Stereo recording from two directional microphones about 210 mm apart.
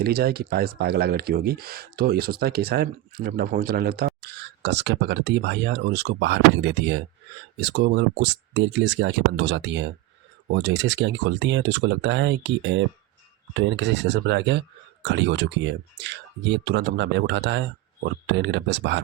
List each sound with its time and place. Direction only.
0.0 s speech: 50° right (ahead or behind)